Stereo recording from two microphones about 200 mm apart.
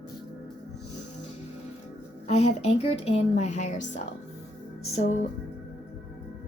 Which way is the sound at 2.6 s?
30° left (ahead or behind).